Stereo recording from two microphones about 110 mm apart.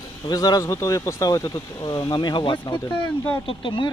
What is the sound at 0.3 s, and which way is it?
Speech, 35° left (ahead or behind).